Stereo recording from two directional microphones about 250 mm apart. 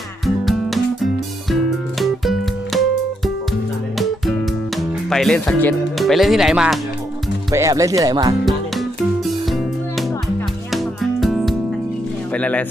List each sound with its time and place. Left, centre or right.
0.4 s music: centre
3.9 s music: centre
7.5 s speech: centre
8.4 s music: centre
12.3 s speech: centre